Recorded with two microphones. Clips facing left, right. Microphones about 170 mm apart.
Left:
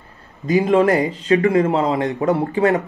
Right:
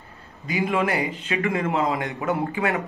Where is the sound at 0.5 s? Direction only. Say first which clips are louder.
Left 9 dB; 40° left (ahead or behind).